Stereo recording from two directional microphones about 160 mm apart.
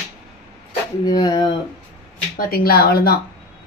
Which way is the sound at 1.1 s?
25° left (ahead or behind).